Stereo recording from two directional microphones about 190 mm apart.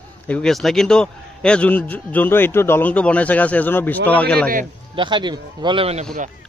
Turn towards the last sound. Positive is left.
turn(degrees=-30)  # may be behind; listen again after turning